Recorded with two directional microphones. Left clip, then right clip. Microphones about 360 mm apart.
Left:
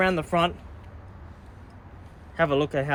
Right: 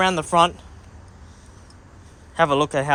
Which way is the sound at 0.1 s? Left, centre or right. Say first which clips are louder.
Right 6 dB; centre.